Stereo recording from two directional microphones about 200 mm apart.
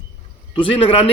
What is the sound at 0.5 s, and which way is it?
Speech, 30° left (ahead or behind).